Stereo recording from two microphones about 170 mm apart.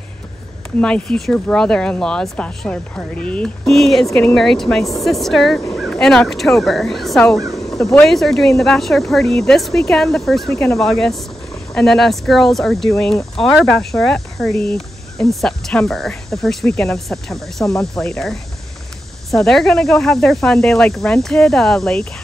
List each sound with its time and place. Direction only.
0.7 s speech: 5° left (ahead or behind)
7.5 s a sound: 20° left (ahead or behind)
8.0 s speech: centre (ahead or behind)